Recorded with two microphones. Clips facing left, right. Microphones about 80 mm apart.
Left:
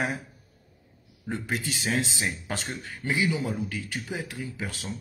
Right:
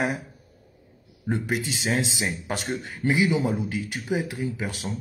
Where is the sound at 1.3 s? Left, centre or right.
Centre.